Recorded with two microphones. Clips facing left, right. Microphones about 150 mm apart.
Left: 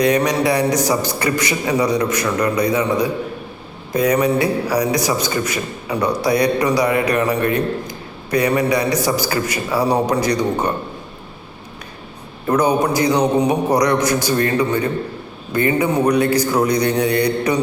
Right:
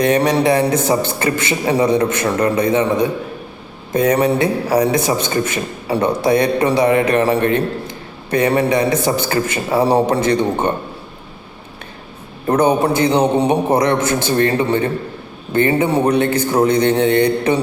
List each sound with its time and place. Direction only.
0.0 s a man's voice: 25° right (ahead or behind)
12.5 s a man's voice: 30° right (ahead or behind)